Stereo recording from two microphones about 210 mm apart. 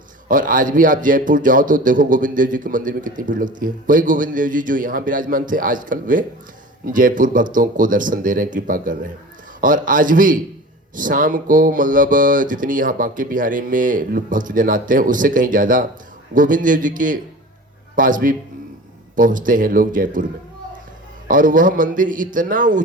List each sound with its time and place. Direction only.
0.3 s a man's voice: 40° right (ahead or behind)
21.2 s a man's voice: 40° right (ahead or behind)